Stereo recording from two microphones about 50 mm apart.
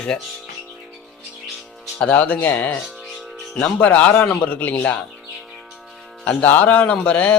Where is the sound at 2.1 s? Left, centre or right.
Left.